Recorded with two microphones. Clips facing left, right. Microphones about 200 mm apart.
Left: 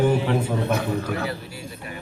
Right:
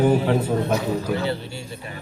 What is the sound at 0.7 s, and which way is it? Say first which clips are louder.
Speech: right 1 dB; 55° left (ahead or behind).